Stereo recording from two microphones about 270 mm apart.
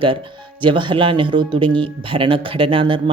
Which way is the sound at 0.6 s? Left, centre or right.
Centre.